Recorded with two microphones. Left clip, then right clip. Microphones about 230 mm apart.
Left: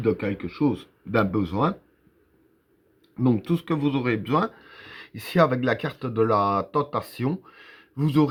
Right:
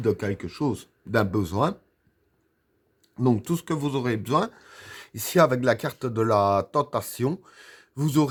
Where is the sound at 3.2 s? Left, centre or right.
Right.